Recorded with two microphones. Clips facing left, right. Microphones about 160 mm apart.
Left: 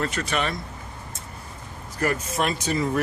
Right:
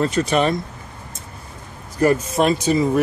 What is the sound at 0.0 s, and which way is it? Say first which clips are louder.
Speech: right 8 dB; 25° right (ahead or behind).